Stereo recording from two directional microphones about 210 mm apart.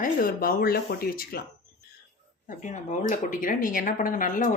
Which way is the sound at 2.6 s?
35° left (ahead or behind).